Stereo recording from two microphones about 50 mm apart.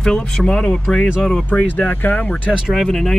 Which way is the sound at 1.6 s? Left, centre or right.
Left.